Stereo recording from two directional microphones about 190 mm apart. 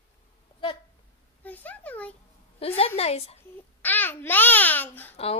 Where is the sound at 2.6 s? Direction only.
30° left (ahead or behind).